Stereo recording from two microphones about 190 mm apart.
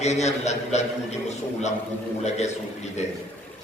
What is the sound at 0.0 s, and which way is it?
Speech, 35° left (ahead or behind).